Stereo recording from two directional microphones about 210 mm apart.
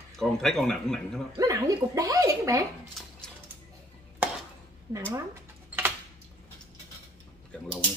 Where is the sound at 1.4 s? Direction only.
15° right (ahead or behind).